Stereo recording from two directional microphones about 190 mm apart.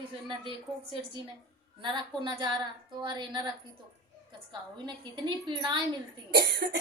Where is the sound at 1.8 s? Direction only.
25° right (ahead or behind).